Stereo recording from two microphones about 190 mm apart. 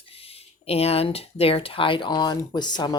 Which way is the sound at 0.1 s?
30° left (ahead or behind).